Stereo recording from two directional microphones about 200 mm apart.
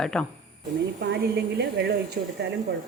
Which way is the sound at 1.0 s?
55° right (ahead or behind).